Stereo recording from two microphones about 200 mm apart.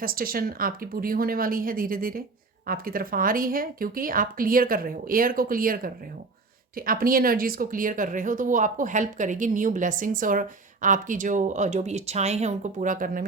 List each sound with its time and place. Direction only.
0.0 s speech: 45° right (ahead or behind)